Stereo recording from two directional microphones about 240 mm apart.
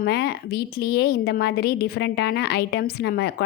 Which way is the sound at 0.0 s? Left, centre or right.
Left.